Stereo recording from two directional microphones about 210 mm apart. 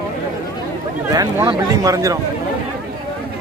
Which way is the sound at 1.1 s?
15° right (ahead or behind).